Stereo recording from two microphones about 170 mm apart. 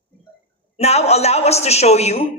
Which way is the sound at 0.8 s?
40° left (ahead or behind).